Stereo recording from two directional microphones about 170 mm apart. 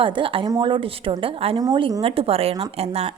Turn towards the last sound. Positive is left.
turn(degrees=-35)  # may be behind; listen again after turning